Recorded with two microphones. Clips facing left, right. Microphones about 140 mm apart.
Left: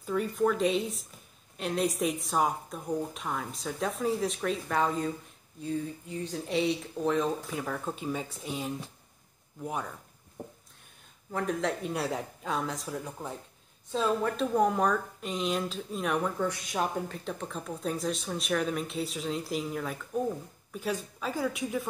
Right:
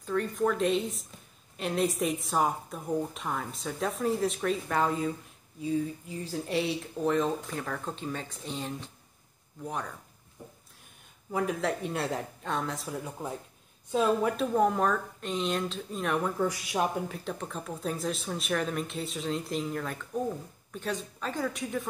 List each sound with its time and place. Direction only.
0.0 s speech: 5° left (ahead or behind)
11.3 s speech: 5° right (ahead or behind)